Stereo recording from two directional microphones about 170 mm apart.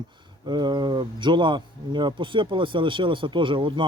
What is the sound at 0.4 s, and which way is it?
Speech, 25° right (ahead or behind).